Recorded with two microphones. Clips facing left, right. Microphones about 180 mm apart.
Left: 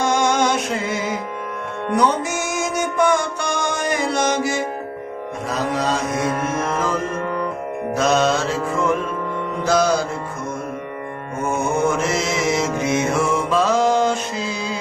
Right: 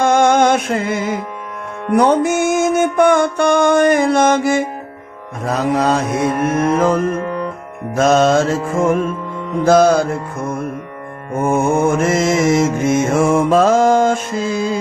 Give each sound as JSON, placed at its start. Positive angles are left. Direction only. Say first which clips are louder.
{"t": 0.0, "sound": "music", "louder": "right 6 dB", "side_deg": -55}
{"t": 7.9, "sound": "mantra", "louder": "right 6 dB", "side_deg": -50}
{"t": 11.4, "sound": "mantra", "louder": "right 5 dB", "side_deg": -55}